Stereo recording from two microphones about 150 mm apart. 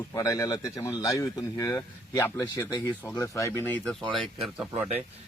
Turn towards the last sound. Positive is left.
turn(degrees=-10)  # may be behind; listen again after turning